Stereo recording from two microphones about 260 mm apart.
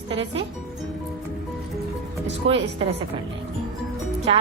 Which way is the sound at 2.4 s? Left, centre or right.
Right.